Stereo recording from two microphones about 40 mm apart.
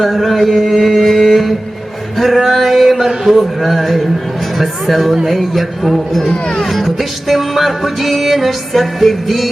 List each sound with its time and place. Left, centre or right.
0.0 s mantra: centre
2.1 s male singing: centre
2.9 s a sound: centre
3.6 s music: centre